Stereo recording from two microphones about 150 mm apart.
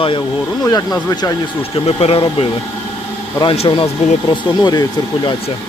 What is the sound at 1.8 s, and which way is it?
Speech, 40° left (ahead or behind).